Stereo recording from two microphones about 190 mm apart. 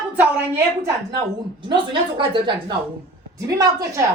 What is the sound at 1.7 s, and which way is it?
A woman's voice, 25° right (ahead or behind).